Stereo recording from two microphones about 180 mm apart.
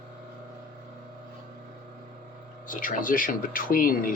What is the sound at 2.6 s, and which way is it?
Speech, 50° left (ahead or behind).